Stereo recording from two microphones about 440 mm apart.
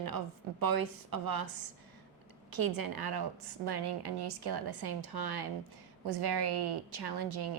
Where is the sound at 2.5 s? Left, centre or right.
Right.